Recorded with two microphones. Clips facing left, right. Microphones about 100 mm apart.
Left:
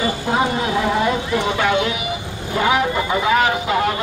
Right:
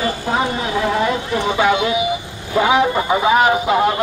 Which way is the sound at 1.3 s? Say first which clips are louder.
Right 2 dB; 15° right (ahead or behind).